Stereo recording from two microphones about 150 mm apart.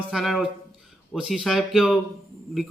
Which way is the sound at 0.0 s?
5° right (ahead or behind).